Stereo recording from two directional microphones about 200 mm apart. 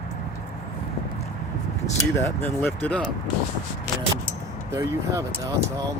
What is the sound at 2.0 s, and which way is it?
Speech, 15° left (ahead or behind).